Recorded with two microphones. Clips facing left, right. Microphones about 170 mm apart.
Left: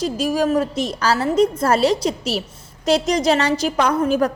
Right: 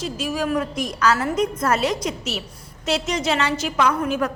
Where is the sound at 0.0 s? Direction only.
40° left (ahead or behind).